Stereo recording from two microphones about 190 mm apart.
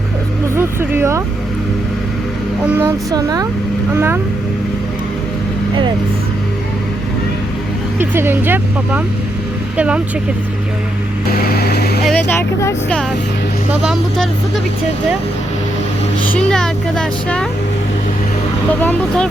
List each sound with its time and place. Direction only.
0.5 s vehicle: 10° right (ahead or behind)
2.8 s speech: 20° right (ahead or behind)
7.9 s speech: 10° right (ahead or behind)
11.3 s vehicle: 55° left (ahead or behind)
12.0 s speech: 10° left (ahead or behind)
13.8 s speech: centre (ahead or behind)
16.3 s speech: 5° left (ahead or behind)
18.7 s speech: 10° left (ahead or behind)